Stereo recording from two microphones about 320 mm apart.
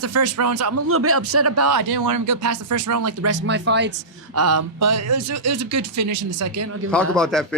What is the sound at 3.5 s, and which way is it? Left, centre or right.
Speech, right.